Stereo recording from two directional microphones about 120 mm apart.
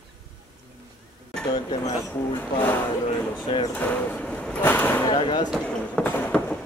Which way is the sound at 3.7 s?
10° left (ahead or behind).